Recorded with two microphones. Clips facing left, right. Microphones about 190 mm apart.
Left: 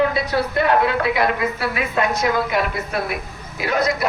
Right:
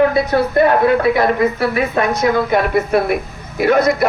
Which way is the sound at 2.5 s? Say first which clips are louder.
Right 8 dB; 55° right (ahead or behind).